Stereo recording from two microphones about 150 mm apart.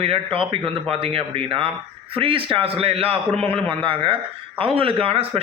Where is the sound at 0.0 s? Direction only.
40° right (ahead or behind).